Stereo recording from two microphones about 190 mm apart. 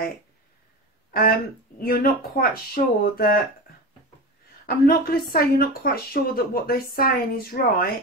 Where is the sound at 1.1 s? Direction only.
50° left (ahead or behind).